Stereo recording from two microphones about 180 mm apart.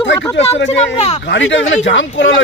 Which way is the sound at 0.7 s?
35° left (ahead or behind).